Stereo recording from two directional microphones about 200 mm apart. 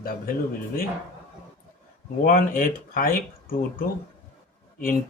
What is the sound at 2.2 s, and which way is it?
Speech, 40° left (ahead or behind).